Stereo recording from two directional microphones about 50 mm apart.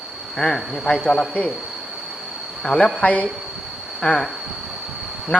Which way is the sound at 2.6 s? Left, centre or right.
Centre.